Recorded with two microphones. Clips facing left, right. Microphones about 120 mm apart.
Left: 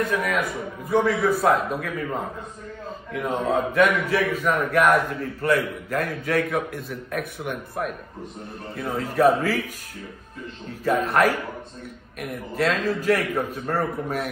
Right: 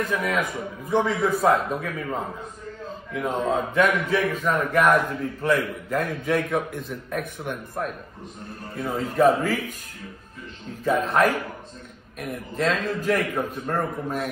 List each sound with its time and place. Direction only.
0.0 s a man's voice: centre (ahead or behind)
3.1 s a man's voice: centre (ahead or behind)
10.8 s a man's voice: 5° left (ahead or behind)